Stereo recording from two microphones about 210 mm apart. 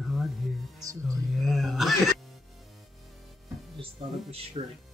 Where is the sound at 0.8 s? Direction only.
15° right (ahead or behind).